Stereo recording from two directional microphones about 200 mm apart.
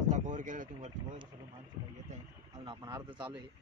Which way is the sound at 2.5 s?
20° right (ahead or behind).